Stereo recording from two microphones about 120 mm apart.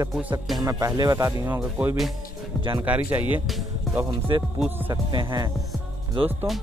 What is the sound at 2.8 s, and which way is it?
Speech, 15° right (ahead or behind).